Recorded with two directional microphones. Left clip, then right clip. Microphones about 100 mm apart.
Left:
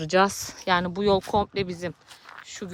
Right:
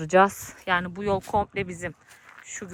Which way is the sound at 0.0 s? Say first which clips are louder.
Right 2 dB; 25° left (ahead or behind).